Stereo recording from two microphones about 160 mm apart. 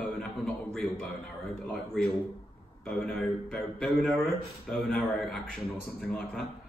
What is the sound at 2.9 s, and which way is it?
A man's voice, 5° left (ahead or behind).